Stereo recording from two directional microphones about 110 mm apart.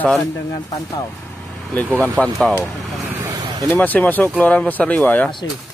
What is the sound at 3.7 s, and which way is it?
Speech, 15° left (ahead or behind).